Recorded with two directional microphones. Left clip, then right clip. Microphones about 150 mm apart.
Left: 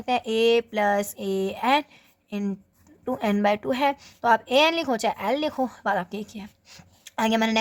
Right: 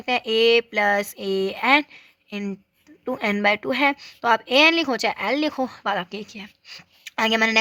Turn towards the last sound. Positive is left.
turn(degrees=-15)  # may be behind; listen again after turning